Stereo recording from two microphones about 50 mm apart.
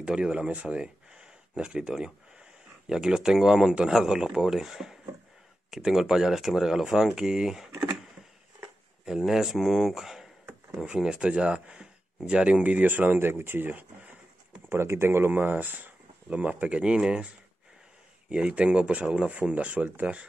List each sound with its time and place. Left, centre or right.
0.0 s speech: centre
9.0 s speech: centre
12.6 s speech: right
14.7 s speech: right; by 17.3 s centre
18.3 s speech: right